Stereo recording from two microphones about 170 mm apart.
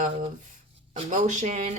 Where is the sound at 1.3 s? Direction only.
45° right (ahead or behind).